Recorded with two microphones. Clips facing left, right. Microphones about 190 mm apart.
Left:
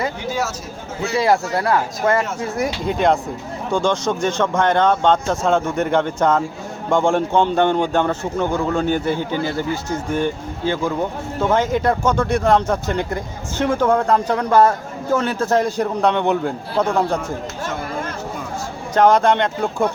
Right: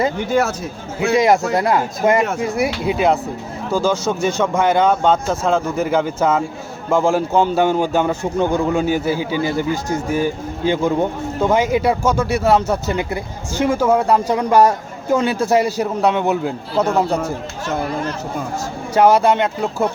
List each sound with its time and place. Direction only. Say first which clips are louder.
1.1 s speech: right 3 dB; 15° right (ahead or behind)
11.3 s speech: right 2 dB; 10° right (ahead or behind)
18.9 s speech: right 1 dB; 10° right (ahead or behind)